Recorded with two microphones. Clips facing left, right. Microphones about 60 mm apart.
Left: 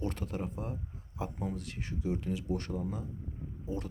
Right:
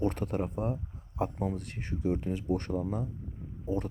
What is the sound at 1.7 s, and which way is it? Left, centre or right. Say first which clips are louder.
Speech: right 4 dB; right.